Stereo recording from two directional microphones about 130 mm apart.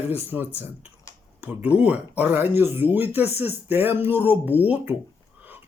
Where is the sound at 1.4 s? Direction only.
10° right (ahead or behind).